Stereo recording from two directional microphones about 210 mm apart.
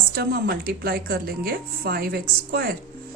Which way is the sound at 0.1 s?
50° right (ahead or behind).